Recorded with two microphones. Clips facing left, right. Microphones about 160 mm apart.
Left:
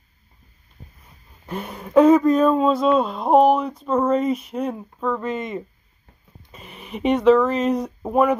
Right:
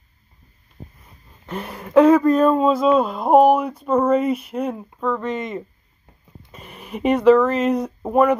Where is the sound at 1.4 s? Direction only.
5° left (ahead or behind).